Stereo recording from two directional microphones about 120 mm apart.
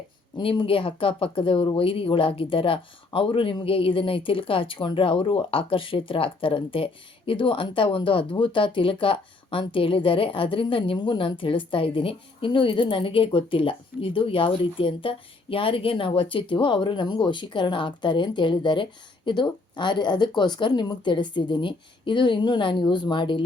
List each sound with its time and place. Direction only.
0.3 s speech: 45° left (ahead or behind)